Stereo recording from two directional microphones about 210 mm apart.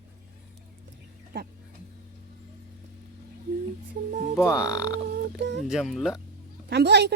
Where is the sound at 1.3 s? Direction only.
50° right (ahead or behind).